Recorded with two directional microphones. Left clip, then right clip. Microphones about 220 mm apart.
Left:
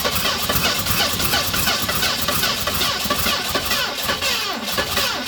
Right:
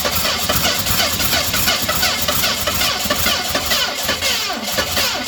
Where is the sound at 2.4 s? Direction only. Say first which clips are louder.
Right 3 dB; 5° left (ahead or behind).